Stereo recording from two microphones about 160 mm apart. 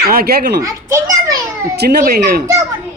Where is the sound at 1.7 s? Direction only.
90° right.